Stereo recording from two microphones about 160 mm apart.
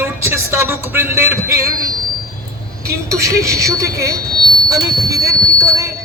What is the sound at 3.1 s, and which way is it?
Speech, 20° right (ahead or behind).